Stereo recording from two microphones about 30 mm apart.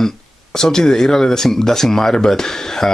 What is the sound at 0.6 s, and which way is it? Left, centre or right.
Speech, centre.